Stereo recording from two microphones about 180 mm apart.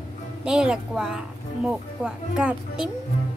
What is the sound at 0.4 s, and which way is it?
A woman's voice, 5° right (ahead or behind).